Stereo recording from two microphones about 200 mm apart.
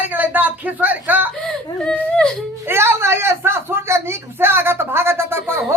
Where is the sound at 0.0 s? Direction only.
10° right (ahead or behind).